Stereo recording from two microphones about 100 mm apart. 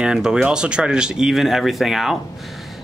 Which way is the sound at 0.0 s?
5° right (ahead or behind).